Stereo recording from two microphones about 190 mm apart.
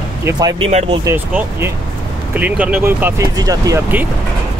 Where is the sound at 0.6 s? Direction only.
35° right (ahead or behind).